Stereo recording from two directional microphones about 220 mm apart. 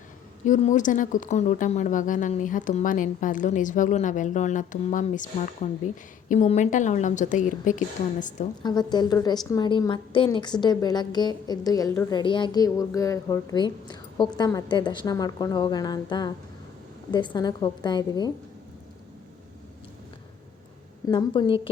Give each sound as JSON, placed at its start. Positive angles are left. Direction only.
{"t": 0.4, "sound": "speech", "side_deg": 35}
{"t": 8.6, "sound": "a woman's voice", "side_deg": 20}
{"t": 21.1, "sound": "a woman's voice", "side_deg": 20}